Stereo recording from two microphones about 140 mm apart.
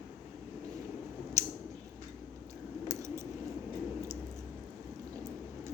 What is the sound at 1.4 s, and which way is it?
Scissors, 20° right (ahead or behind).